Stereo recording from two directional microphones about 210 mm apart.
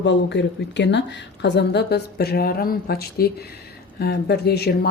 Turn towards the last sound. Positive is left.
turn(degrees=50)  # may be behind; listen again after turning